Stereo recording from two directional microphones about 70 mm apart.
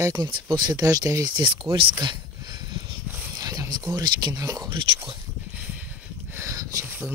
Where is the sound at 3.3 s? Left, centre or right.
Right.